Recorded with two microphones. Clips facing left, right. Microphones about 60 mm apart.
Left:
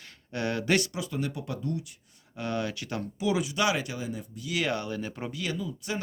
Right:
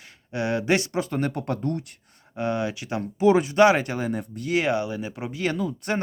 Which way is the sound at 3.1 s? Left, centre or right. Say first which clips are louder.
Right 11 dB; right.